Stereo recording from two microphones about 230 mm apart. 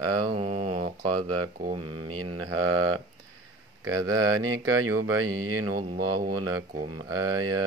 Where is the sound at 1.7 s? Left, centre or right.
Right.